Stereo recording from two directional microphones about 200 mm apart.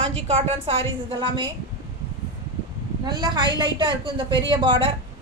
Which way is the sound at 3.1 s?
20° right (ahead or behind).